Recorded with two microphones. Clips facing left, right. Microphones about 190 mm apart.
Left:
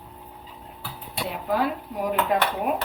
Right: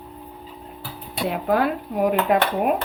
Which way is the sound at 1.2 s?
60° right (ahead or behind).